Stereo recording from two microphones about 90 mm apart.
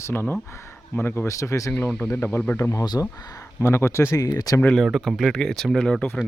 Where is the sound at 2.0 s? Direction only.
25° left (ahead or behind).